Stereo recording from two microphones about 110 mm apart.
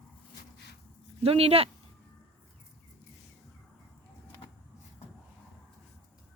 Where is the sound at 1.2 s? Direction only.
65° right (ahead or behind).